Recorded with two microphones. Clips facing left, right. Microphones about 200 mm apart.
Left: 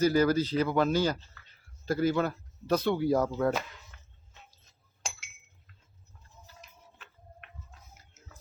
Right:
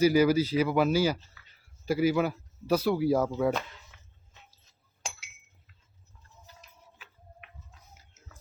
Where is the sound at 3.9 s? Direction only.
5° right (ahead or behind).